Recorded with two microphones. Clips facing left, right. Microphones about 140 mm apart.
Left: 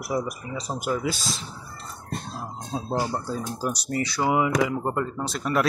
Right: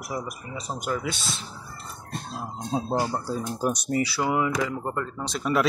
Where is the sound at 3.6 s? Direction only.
20° right (ahead or behind).